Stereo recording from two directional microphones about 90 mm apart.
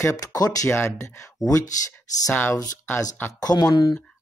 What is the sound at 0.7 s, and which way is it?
Speech, 30° left (ahead or behind).